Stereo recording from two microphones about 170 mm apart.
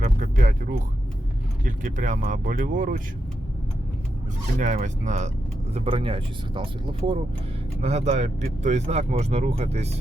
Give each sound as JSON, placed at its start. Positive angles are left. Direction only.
{"t": 0.0, "sound": "a sound", "side_deg": -50}
{"t": 1.6, "sound": "speech", "side_deg": -50}
{"t": 4.6, "sound": "speech", "side_deg": -45}
{"t": 5.7, "sound": "speech", "side_deg": -35}